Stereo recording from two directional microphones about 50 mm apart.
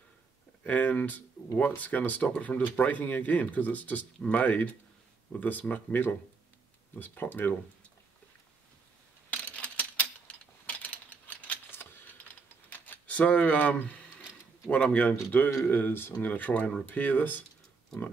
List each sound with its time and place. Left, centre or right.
0.7 s speech: left
9.3 s a sound: left
11.7 s typing: left
14.7 s speech: left